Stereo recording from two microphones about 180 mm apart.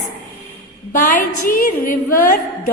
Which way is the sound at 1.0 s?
50° left (ahead or behind).